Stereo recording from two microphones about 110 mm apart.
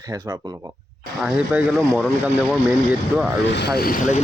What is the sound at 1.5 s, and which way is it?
Speech, 15° right (ahead or behind).